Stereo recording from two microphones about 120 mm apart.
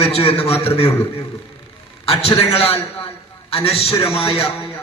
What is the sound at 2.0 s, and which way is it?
A man's voice, 55° left (ahead or behind).